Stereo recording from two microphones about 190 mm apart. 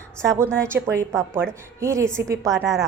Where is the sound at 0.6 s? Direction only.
15° right (ahead or behind).